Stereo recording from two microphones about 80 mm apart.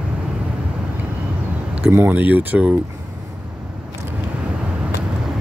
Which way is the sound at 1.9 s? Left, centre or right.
Right.